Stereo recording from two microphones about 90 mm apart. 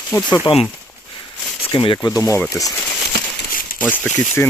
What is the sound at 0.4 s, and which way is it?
Speech, 90° left.